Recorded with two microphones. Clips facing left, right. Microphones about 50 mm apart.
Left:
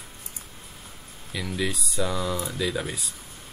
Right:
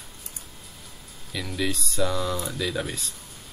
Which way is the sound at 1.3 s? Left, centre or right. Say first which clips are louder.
Even; centre.